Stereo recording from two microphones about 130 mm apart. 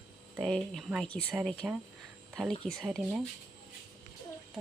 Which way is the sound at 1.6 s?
10° right (ahead or behind).